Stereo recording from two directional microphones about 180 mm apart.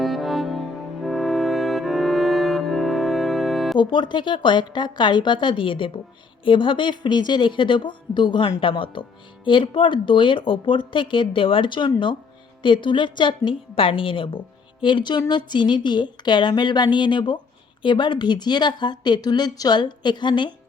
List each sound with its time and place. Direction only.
0.0 s music: centre (ahead or behind)
3.8 s speech: 25° left (ahead or behind)